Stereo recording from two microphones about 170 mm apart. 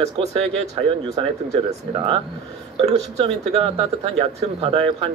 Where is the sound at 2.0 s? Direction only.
35° right (ahead or behind).